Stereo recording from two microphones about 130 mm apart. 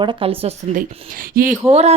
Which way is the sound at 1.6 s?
55° right (ahead or behind).